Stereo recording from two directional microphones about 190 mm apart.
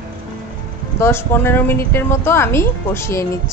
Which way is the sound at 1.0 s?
10° left (ahead or behind).